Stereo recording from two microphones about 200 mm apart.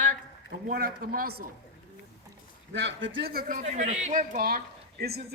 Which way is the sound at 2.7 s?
65° right (ahead or behind).